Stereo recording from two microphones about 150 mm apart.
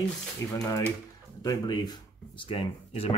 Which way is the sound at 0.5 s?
25° left (ahead or behind).